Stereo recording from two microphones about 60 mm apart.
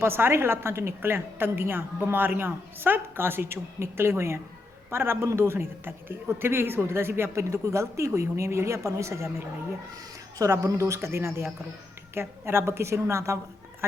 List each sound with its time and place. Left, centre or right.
0.0 s a woman's voice: right
9.9 s a sound: right
10.7 s a woman's voice: right